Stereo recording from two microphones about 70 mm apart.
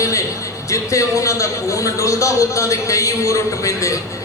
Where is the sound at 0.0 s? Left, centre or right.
Left.